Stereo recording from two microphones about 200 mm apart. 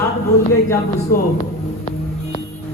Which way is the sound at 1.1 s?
45° left (ahead or behind).